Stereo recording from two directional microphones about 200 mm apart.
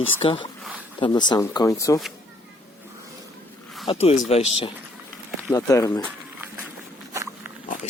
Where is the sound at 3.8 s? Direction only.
30° left (ahead or behind).